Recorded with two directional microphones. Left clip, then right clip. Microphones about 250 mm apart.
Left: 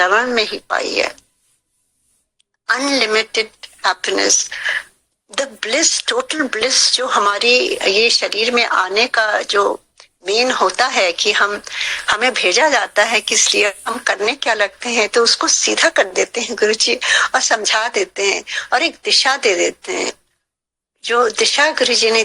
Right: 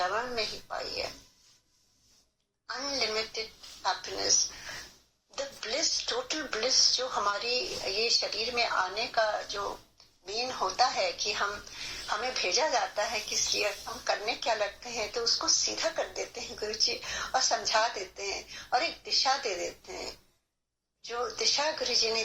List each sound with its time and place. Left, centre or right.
0.0 s speech: left
2.6 s speech: left
5.3 s speech: left